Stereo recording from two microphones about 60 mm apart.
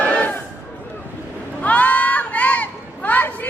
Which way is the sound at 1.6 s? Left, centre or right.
Left.